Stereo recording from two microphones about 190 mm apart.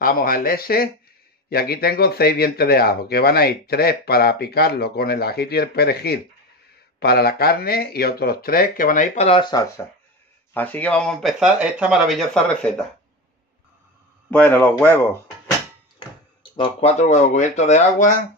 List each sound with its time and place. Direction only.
0.0 s speech: 50° left (ahead or behind); by 9.7 s 20° left (ahead or behind)
10.5 s speech: 10° left (ahead or behind)
14.3 s speech: 10° left (ahead or behind)
16.0 s a sound: 25° left (ahead or behind)
16.5 s speech: 30° left (ahead or behind)